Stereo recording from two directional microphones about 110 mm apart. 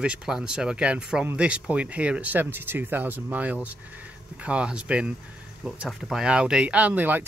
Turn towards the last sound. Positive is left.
turn(degrees=-15)  # may be behind; listen again after turning